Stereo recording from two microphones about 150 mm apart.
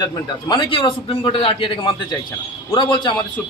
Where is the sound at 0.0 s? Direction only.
25° left (ahead or behind).